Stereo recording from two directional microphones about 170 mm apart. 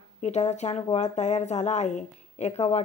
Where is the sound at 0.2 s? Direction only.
40° left (ahead or behind).